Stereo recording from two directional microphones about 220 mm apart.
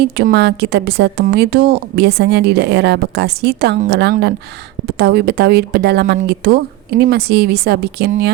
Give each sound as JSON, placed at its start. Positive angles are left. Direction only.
{"t": 0.0, "sound": "a woman's voice", "side_deg": -50}